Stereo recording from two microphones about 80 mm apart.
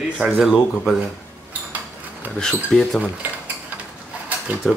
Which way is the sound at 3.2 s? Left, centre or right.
Right.